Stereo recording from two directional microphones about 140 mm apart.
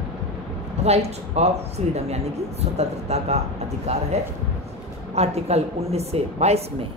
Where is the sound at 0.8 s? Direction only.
50° right (ahead or behind).